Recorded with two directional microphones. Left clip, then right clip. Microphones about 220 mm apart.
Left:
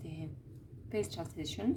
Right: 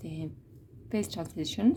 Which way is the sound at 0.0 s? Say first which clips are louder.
Right 6 dB; 35° right (ahead or behind).